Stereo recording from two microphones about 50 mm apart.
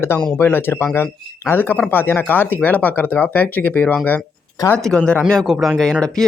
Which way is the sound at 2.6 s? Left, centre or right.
Left.